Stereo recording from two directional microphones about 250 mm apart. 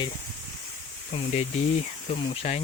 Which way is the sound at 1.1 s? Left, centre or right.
Left.